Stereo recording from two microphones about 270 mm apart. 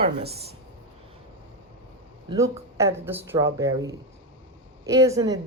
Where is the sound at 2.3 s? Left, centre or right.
Centre.